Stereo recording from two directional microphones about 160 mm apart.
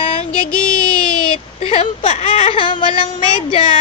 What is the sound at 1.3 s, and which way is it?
Speech, 40° left (ahead or behind).